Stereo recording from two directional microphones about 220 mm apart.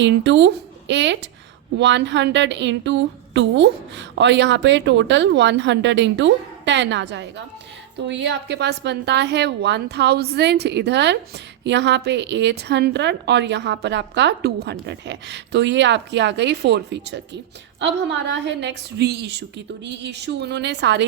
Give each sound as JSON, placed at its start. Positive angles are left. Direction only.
{"t": 0.0, "sound": "a woman's voice", "side_deg": -55}